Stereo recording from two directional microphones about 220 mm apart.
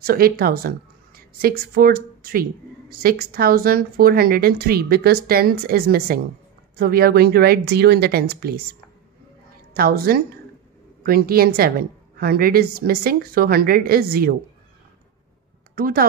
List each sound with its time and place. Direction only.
0.0 s a woman's voice: 40° right (ahead or behind)
9.8 s a woman's voice: 40° right (ahead or behind)
15.7 s speech: 40° right (ahead or behind)